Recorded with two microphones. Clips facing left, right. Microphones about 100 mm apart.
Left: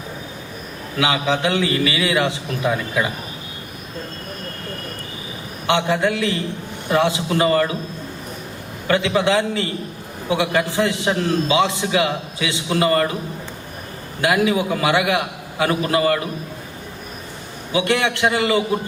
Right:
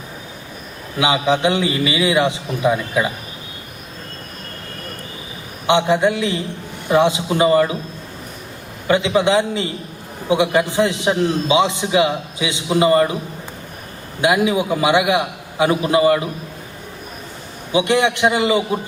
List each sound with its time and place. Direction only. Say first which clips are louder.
0.9 s a man's voice: right 3 dB; 20° right (ahead or behind)
5.6 s a man's voice: right 3 dB; 20° right (ahead or behind)
8.9 s a man's voice: right 2 dB; 20° right (ahead or behind)
14.2 s a man's voice: right 2 dB; 20° right (ahead or behind)
17.7 s a man's voice: right 3 dB; 20° right (ahead or behind)